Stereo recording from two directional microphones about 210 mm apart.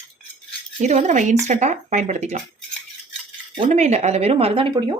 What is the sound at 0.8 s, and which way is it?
Speech, 35° right (ahead or behind).